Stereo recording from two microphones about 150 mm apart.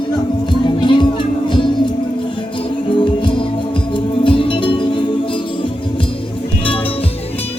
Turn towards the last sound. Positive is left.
turn(degrees=35)  # may be behind; listen again after turning